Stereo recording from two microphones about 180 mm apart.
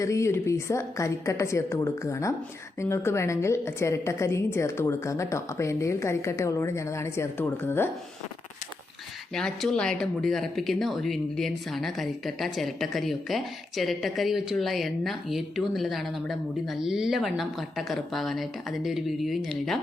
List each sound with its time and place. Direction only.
0.0 s a woman's voice: 15° left (ahead or behind)
9.3 s speech: 5° left (ahead or behind)